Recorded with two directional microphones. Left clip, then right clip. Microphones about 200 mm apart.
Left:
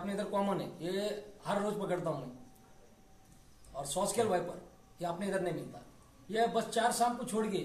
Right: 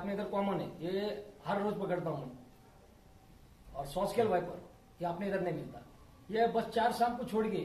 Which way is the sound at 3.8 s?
15° left (ahead or behind).